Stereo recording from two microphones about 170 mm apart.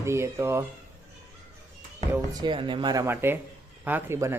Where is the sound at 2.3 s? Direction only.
25° right (ahead or behind).